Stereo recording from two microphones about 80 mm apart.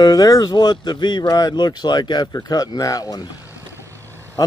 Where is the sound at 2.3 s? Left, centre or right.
Left.